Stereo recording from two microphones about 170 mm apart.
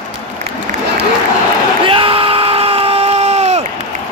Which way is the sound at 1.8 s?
30° right (ahead or behind).